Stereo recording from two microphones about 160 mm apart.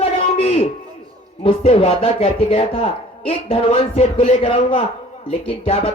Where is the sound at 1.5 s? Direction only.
35° left (ahead or behind).